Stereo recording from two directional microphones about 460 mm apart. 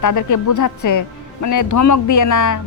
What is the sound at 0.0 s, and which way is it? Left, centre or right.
Speech, left.